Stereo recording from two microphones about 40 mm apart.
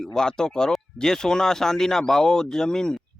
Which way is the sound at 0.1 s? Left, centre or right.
Centre.